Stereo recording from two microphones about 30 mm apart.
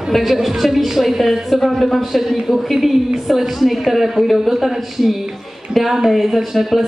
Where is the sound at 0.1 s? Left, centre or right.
Centre.